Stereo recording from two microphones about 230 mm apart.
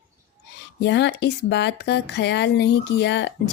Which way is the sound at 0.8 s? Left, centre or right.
Left.